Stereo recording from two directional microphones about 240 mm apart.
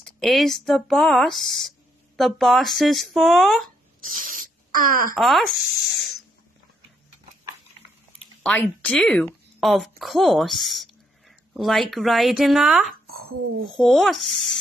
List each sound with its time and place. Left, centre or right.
0.2 s a woman's voice: centre
4.0 s spray: right
5.1 s a woman's voice: centre
8.4 s speech: centre
13.0 s a sound: right
13.7 s a woman's voice: centre